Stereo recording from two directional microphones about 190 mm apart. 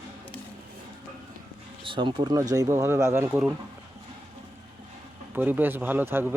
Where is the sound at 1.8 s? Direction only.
25° right (ahead or behind).